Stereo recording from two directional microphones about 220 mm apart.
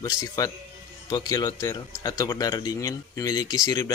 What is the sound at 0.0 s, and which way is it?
Speech, 15° left (ahead or behind).